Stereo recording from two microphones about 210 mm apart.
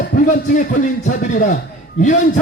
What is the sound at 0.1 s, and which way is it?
A man's voice, 40° left (ahead or behind).